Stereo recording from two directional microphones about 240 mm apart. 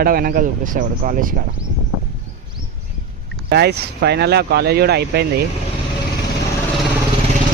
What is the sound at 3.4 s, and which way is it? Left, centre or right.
Speech, right.